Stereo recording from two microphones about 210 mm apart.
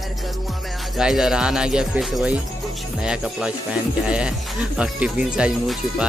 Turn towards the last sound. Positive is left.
turn(degrees=-5)  # may be behind; listen again after turning